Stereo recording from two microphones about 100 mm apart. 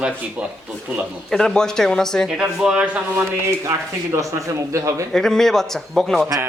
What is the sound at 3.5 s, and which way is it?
Speech, 35° right (ahead or behind).